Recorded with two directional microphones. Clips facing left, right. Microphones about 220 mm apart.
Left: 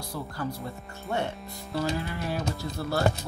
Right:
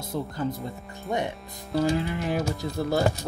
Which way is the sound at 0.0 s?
20° right (ahead or behind).